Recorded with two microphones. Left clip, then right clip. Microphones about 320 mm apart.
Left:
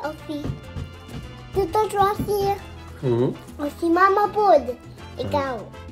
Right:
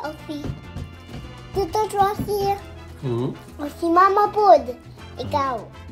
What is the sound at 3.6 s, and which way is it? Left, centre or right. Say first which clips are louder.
A child's voice: right 2 dB; centre.